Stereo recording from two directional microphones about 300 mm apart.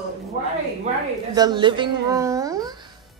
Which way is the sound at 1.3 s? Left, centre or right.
Centre.